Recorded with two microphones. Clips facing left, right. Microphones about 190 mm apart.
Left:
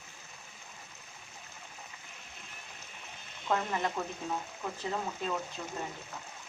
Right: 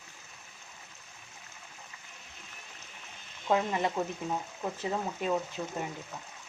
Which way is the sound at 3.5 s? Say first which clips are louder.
Right 4 dB; 15° right (ahead or behind).